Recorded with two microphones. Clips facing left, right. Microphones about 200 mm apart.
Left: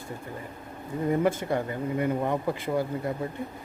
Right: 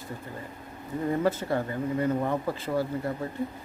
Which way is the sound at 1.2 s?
20° left (ahead or behind).